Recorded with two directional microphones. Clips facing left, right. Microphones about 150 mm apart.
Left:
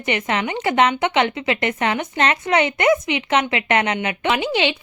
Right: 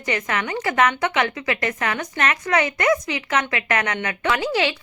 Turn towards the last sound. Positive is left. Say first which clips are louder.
# left 1 dB
turn(degrees=20)  # may be behind; listen again after turning